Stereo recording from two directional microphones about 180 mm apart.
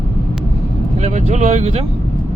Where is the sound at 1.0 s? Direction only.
40° right (ahead or behind).